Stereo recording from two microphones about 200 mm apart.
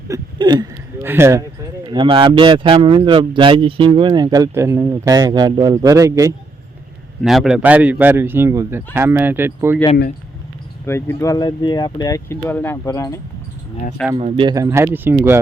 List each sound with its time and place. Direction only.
0.1 s a man's voice: 20° right (ahead or behind)
1.9 s speech: 25° right (ahead or behind)
7.2 s a man's voice: centre (ahead or behind)
10.8 s speech: 10° left (ahead or behind)
14.2 s a man's voice: 30° right (ahead or behind); by 15.4 s 10° right (ahead or behind)